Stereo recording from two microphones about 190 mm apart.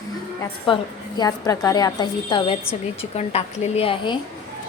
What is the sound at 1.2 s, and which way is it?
A woman's voice, 20° left (ahead or behind).